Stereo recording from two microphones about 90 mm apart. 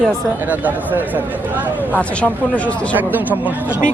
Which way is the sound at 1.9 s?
15° left (ahead or behind).